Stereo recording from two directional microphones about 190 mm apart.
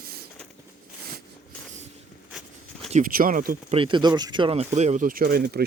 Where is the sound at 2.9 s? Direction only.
40° right (ahead or behind).